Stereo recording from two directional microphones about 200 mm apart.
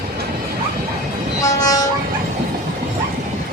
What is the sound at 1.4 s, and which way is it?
Train, 15° left (ahead or behind).